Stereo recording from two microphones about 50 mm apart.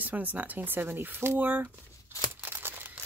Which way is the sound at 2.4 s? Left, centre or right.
Right.